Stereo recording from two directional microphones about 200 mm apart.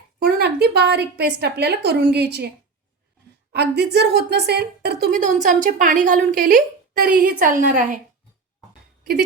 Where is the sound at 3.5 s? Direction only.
55° right (ahead or behind); by 7.9 s 40° right (ahead or behind).